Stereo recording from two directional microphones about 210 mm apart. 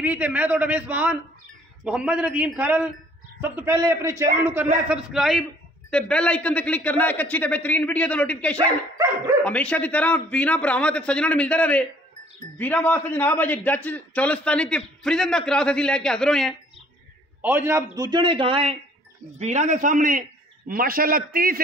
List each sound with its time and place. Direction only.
0.0 s a man's voice: 5° right (ahead or behind)
17.4 s a man's voice: 10° right (ahead or behind); by 21.5 s 45° right (ahead or behind)